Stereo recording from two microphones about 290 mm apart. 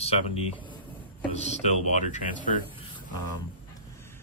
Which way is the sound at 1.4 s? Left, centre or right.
Left.